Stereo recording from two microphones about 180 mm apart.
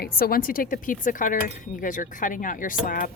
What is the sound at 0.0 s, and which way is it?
Speech, 55° left (ahead or behind).